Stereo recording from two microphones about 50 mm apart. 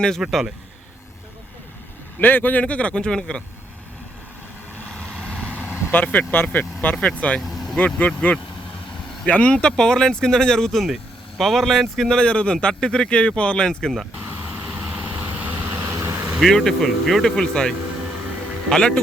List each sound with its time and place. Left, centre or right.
0.2 s speech: centre
2.2 s speech: left; by 3.4 s centre
5.1 s vehicle: centre
5.9 s speech: left
7.4 s vehicle: centre
7.9 s speech: left
9.2 s a man's voice: left
14.2 s vehicle: right
14.7 s vehicle: right
15.6 s vehicle: right
16.4 s a man's voice: centre